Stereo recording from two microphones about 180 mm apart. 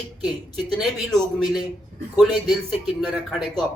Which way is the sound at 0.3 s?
Centre (ahead or behind).